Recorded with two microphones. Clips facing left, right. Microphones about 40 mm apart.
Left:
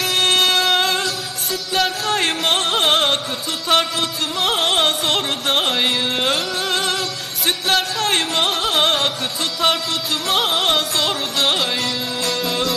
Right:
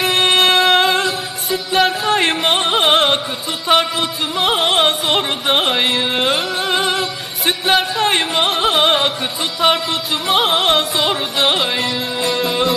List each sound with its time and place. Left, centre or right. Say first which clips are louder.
0.0 s music: right 3 dB; centre